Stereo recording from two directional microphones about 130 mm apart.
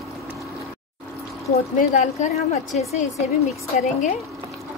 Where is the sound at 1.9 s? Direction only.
65° left (ahead or behind).